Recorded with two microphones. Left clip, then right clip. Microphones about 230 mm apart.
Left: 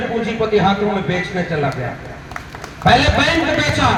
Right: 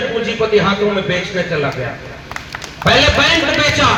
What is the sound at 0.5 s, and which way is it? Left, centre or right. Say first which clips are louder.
Speech: right 2 dB; left.